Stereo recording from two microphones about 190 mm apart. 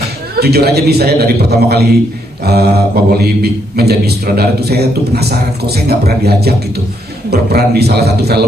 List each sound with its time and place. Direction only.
0.3 s a man's voice: 55° right (ahead or behind)